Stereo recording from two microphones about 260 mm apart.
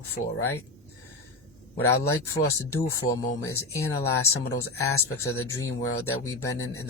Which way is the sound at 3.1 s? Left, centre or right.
Centre.